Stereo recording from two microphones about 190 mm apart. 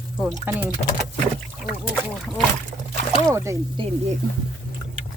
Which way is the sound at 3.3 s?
15° right (ahead or behind).